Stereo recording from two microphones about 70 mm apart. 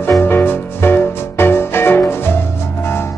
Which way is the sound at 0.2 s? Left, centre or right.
Left.